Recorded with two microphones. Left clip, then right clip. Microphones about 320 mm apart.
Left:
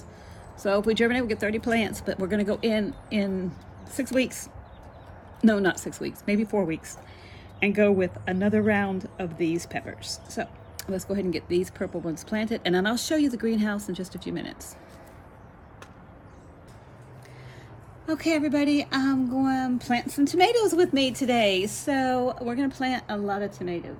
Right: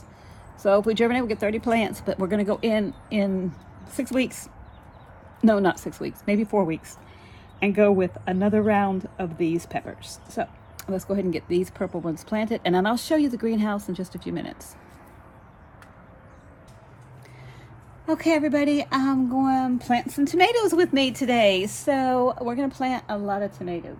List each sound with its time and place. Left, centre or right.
0.6 s speech: centre
18.0 s speech: right